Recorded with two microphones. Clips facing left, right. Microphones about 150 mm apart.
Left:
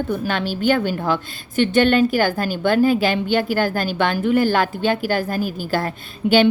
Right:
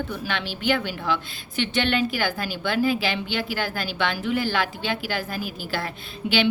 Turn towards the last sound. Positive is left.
turn(degrees=45)  # may be behind; listen again after turning